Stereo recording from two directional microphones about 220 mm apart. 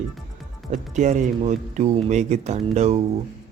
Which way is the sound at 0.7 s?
35° right (ahead or behind).